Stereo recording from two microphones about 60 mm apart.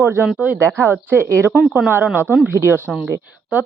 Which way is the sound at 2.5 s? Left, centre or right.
Right.